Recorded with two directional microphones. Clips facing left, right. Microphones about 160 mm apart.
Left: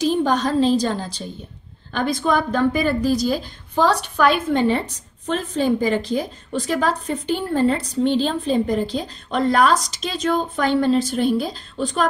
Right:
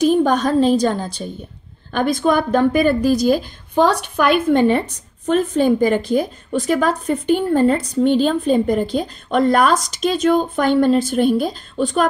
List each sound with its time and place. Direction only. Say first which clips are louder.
0.0 s a woman's voice: right 4 dB; 50° right (ahead or behind)